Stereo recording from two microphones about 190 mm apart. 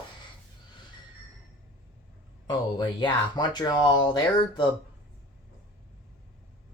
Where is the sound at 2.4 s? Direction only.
25° left (ahead or behind).